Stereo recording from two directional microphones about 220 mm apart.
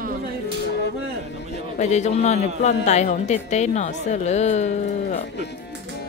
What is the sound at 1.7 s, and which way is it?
A woman's voice, 30° left (ahead or behind).